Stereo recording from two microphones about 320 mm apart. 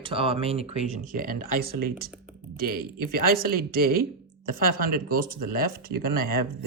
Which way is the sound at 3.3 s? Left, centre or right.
Right.